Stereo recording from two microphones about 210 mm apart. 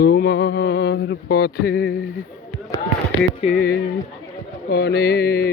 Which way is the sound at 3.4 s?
30° left (ahead or behind).